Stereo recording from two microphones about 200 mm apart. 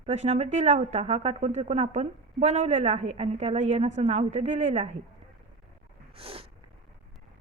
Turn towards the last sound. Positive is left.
turn(degrees=-30)  # may be behind; listen again after turning